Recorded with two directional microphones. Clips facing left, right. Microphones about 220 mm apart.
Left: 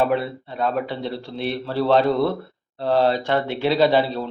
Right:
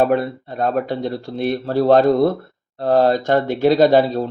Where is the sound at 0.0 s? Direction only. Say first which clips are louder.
Right 4 dB; 45° right (ahead or behind).